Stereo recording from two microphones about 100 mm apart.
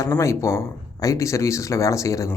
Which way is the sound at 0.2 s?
30° left (ahead or behind).